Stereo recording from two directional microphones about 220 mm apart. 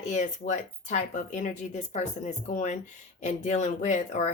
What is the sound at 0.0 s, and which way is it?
A woman's voice, 35° left (ahead or behind).